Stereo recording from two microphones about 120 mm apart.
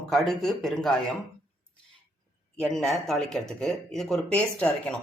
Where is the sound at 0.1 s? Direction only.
5° left (ahead or behind).